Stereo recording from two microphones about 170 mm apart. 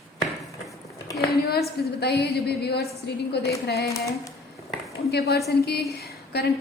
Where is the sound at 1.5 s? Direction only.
70° left (ahead or behind).